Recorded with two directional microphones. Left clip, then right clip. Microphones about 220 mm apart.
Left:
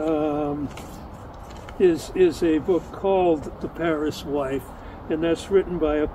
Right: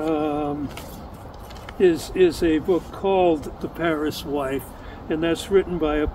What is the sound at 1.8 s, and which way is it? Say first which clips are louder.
Speech: right 1 dB; 10° right (ahead or behind).